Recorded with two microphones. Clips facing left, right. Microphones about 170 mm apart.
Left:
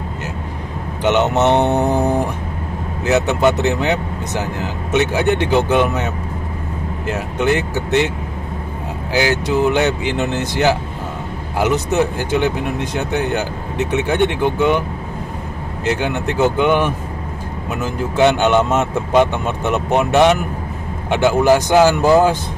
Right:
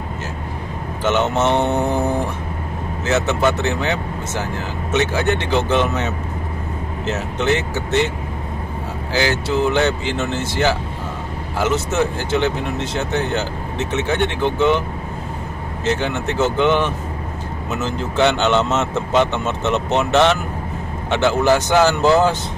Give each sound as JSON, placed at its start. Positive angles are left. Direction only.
{"t": 1.0, "sound": "speech", "side_deg": 15}
{"t": 9.1, "sound": "speech", "side_deg": 15}
{"t": 15.8, "sound": "speech", "side_deg": 15}